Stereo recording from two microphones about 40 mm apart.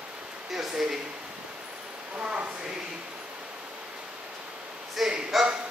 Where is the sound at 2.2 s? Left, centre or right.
Right.